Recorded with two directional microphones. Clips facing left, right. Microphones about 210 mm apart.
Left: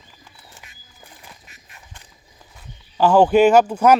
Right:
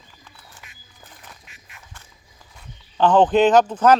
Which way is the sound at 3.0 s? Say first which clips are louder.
Left 2 dB; 10° left (ahead or behind).